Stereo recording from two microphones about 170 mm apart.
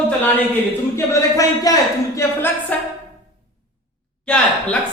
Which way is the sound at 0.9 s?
20° left (ahead or behind).